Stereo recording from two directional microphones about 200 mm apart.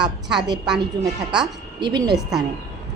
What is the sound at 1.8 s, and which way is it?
Speech, 20° right (ahead or behind).